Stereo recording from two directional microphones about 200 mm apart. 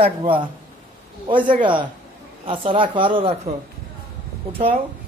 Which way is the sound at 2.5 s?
25° right (ahead or behind).